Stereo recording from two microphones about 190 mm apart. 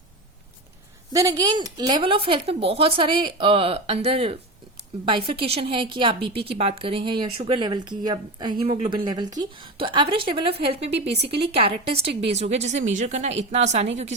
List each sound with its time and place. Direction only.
1.1 s speech: 20° right (ahead or behind)
10.8 s a woman's voice: 65° right (ahead or behind)
11.3 s a woman's voice: 30° right (ahead or behind)